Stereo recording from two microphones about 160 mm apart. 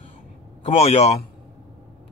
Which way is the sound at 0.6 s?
40° left (ahead or behind).